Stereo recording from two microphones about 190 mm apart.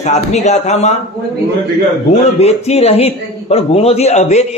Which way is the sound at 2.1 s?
35° left (ahead or behind).